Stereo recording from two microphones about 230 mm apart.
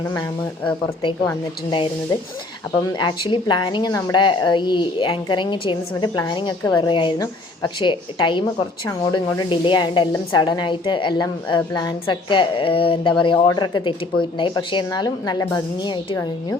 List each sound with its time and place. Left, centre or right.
0.0 s speech: centre
1.7 s a woman's voice: left